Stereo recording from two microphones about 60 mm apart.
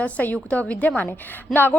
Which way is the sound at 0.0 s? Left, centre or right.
Left.